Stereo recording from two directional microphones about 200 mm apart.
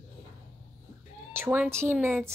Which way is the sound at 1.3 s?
10° right (ahead or behind).